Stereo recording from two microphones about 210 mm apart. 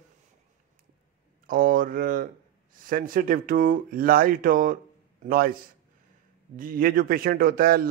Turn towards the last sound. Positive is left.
turn(degrees=-45)  # may be behind; listen again after turning